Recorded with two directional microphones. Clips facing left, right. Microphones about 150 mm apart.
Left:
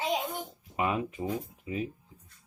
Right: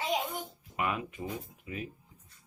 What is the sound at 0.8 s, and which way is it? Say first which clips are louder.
Speech: left 4 dB; 25° left (ahead or behind).